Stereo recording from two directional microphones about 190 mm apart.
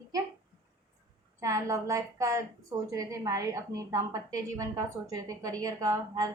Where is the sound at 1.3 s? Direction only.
15° right (ahead or behind).